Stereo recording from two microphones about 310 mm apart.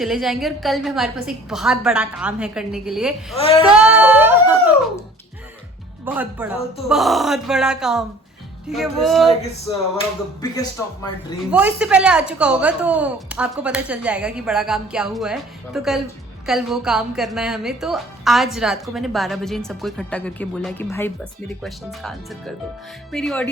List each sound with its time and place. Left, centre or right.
0.0 s speech: centre
3.3 s female singing: centre
3.6 s a sound: centre
6.1 s speech: centre
10.4 s speech: centre
11.5 s speech: centre